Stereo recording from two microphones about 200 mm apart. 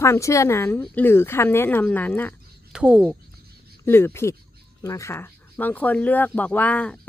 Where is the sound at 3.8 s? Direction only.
10° left (ahead or behind).